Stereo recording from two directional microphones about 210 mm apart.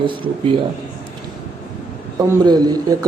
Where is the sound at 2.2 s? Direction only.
20° right (ahead or behind).